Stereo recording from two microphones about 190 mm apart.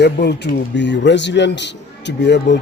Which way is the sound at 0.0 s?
60° left (ahead or behind).